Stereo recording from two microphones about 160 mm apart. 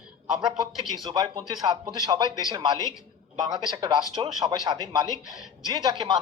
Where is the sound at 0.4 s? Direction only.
25° right (ahead or behind).